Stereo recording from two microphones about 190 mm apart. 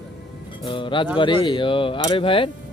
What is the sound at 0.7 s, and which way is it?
Speech, 25° left (ahead or behind).